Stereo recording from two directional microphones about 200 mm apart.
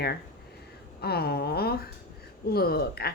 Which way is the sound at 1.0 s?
50° left (ahead or behind).